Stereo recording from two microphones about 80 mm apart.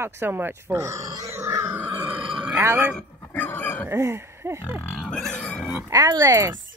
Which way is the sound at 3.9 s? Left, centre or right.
Right.